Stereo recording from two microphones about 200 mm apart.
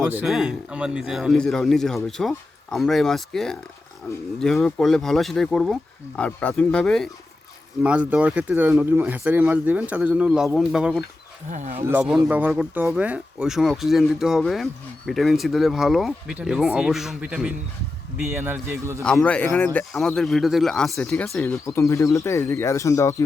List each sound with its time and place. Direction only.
0.0 s speech: 5° right (ahead or behind)
11.5 s speech: 35° right (ahead or behind)
11.9 s speech: 5° right (ahead or behind)
19.0 s speech: 5° left (ahead or behind)
21.7 s speech: 15° left (ahead or behind)